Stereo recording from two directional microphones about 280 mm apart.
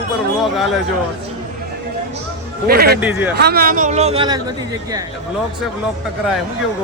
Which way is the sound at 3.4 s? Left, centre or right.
Right.